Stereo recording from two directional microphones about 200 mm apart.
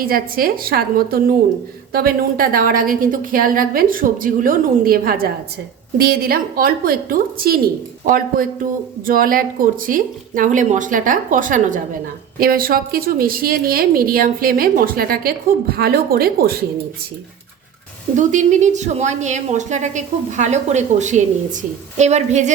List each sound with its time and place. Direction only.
0.0 s a woman's voice: 45° right (ahead or behind)
18.2 s speech: 40° right (ahead or behind)